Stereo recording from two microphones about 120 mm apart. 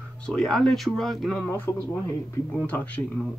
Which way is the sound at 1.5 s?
20° left (ahead or behind).